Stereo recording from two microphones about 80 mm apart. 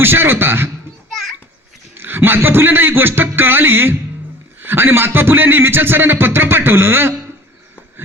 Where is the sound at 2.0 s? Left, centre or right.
Right.